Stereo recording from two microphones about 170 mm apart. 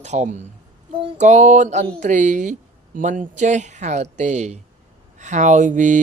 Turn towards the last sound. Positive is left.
turn(degrees=-45)  # may be behind; listen again after turning